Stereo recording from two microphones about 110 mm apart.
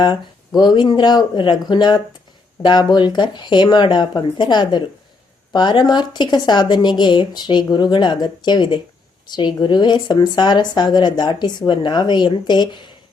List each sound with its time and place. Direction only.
0.0 s speech: 40° left (ahead or behind)